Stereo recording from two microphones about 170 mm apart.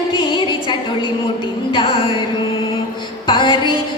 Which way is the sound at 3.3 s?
30° left (ahead or behind).